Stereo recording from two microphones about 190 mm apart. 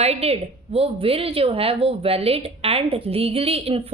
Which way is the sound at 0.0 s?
35° right (ahead or behind).